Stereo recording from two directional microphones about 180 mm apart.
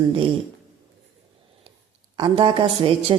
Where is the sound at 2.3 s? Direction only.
30° right (ahead or behind).